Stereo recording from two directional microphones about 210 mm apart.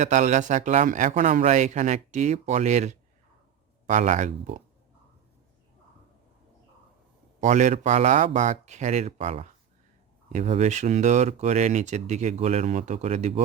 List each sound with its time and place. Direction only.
0.0 s speech: 35° right (ahead or behind)
7.4 s speech: 35° right (ahead or behind)